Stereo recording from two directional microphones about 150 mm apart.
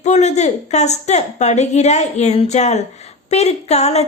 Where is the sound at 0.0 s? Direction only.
50° left (ahead or behind).